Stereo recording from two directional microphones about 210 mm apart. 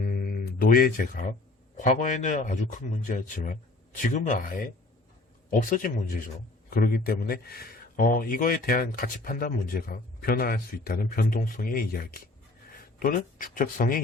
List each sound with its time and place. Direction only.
0.0 s a man's voice: 45° left (ahead or behind)